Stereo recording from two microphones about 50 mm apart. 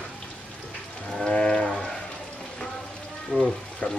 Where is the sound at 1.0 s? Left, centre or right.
Centre.